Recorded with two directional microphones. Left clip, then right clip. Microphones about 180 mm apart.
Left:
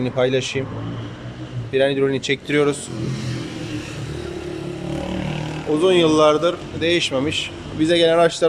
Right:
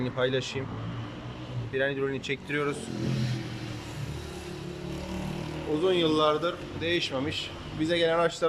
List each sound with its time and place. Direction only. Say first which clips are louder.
0.0 s a man's voice: left 9 dB; 15° left (ahead or behind)
1.7 s speech: left 11 dB; 20° left (ahead or behind)
5.8 s a man's voice: left 10 dB; 15° left (ahead or behind)